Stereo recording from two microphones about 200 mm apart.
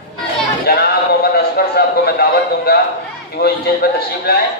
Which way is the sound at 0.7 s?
50° left (ahead or behind).